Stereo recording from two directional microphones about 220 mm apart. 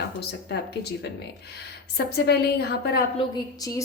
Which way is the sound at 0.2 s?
45° left (ahead or behind).